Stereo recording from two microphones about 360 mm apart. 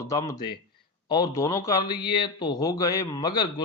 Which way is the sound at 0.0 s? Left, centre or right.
Centre.